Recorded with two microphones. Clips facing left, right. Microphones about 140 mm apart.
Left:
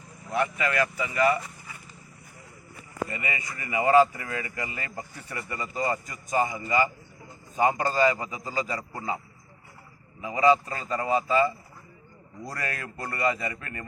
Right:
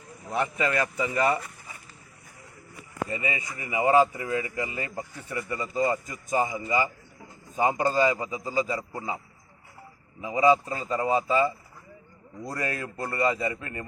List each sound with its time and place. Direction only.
0.3 s speech: 25° right (ahead or behind)
3.1 s speech: 20° right (ahead or behind)
10.2 s speech: 20° right (ahead or behind)